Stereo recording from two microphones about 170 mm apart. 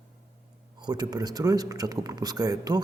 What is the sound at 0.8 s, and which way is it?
Speech, 25° right (ahead or behind).